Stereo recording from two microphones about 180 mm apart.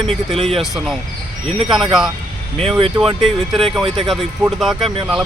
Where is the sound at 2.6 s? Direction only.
30° right (ahead or behind).